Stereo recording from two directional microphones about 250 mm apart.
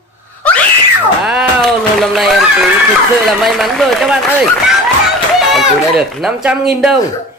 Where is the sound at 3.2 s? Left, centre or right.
Centre.